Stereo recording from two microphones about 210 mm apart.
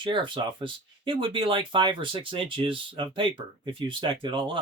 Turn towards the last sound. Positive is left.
turn(degrees=-25)  # may be behind; listen again after turning